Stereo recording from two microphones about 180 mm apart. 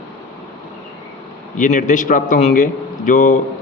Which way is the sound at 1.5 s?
45° left (ahead or behind).